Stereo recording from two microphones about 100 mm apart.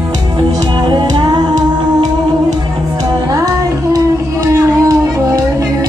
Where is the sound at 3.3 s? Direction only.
35° right (ahead or behind).